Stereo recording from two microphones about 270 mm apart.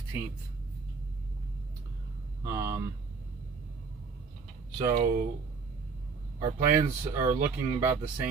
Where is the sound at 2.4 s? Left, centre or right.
Centre.